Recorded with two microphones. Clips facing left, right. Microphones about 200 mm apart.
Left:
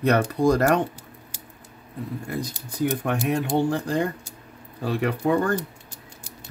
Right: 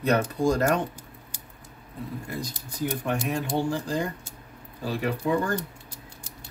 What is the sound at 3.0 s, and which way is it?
Speech, 60° left (ahead or behind).